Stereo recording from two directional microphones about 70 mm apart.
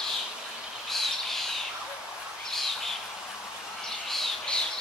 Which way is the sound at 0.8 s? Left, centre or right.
Centre.